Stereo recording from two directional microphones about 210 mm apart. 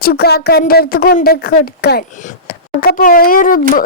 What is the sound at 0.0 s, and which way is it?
A woman's voice, 50° left (ahead or behind).